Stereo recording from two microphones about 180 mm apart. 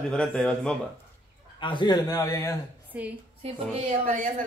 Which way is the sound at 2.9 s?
10° right (ahead or behind).